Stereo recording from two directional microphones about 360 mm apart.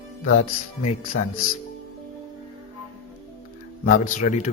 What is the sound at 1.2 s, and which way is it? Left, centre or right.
Speech, left.